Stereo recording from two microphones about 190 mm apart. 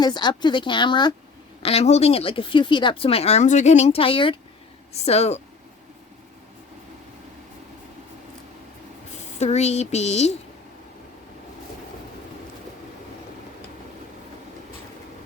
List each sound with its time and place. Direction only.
0.0 s a woman's voice: 25° left (ahead or behind)
9.4 s speech: 35° left (ahead or behind)